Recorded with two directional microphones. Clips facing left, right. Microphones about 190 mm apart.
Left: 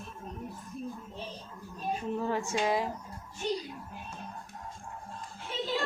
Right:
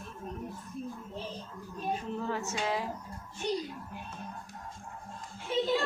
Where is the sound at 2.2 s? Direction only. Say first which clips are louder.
Left 3 dB; 15° left (ahead or behind).